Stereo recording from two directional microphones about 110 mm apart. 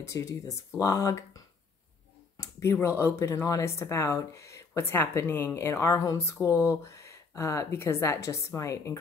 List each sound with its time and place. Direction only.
0.0 s speech: 30° left (ahead or behind)
2.3 s a sound: 25° left (ahead or behind)
3.0 s speech: 25° left (ahead or behind)
6.5 s speech: 15° right (ahead or behind)
6.8 s speech: 25° left (ahead or behind)